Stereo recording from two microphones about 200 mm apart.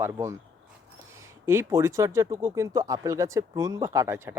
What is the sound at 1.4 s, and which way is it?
Speech, 15° right (ahead or behind).